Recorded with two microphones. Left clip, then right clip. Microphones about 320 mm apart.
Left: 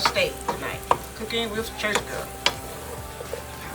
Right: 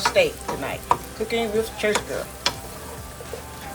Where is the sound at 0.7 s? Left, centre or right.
Centre.